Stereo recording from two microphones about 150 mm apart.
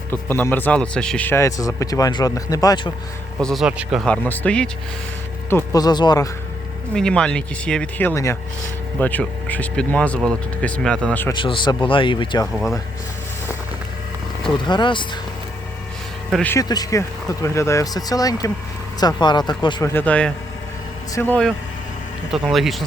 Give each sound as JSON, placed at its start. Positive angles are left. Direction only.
{"t": 0.1, "sound": "speech", "side_deg": 15}
{"t": 3.4, "sound": "speech", "side_deg": 0}
{"t": 4.0, "sound": "speech", "side_deg": 10}
{"t": 5.8, "sound": "speech", "side_deg": 30}
{"t": 6.9, "sound": "speech", "side_deg": 5}
{"t": 11.3, "sound": "a man's voice", "side_deg": 35}
{"t": 14.6, "sound": "a man's voice", "side_deg": 30}
{"t": 16.6, "sound": "speech", "side_deg": 25}
{"t": 19.9, "sound": "speech", "side_deg": 10}
{"t": 22.3, "sound": "speech", "side_deg": 0}